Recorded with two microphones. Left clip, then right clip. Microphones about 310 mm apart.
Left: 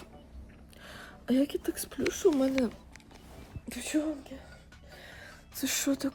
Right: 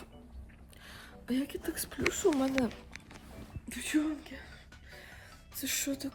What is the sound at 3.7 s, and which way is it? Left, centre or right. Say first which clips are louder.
Speech: left 1 dB; centre.